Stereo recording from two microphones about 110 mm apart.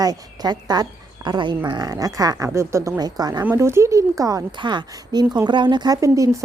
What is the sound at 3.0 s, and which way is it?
Speech, 35° right (ahead or behind).